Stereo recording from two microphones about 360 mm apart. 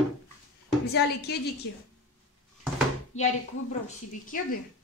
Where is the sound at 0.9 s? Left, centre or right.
Left.